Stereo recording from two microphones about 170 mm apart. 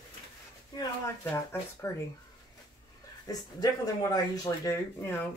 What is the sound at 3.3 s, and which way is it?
Speech, 20° left (ahead or behind).